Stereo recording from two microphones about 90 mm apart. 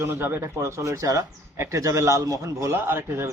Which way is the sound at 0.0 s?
25° right (ahead or behind).